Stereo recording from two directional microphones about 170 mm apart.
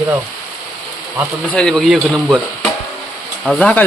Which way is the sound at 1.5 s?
5° left (ahead or behind).